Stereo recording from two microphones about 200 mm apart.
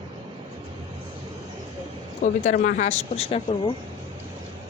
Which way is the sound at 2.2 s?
40° left (ahead or behind).